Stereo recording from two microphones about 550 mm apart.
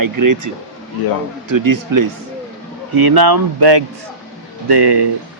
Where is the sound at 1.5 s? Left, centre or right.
Right.